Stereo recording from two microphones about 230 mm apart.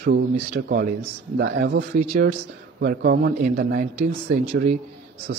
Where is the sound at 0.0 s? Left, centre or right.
Right.